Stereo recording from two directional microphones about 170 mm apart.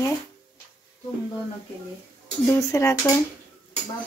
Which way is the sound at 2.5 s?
15° left (ahead or behind).